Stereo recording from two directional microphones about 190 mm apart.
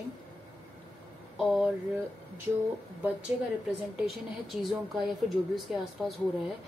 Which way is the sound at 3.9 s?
Centre (ahead or behind).